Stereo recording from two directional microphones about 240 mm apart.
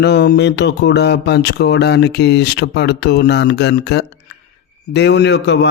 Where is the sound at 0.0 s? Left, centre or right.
Left.